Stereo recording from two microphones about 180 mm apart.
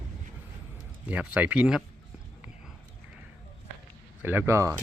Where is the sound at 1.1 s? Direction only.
5° right (ahead or behind).